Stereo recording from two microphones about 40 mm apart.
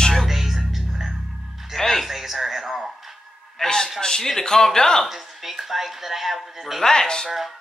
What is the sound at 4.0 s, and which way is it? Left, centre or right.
Speech, centre.